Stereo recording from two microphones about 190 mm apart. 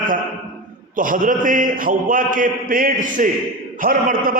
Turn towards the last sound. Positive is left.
turn(degrees=-50)  # may be behind; listen again after turning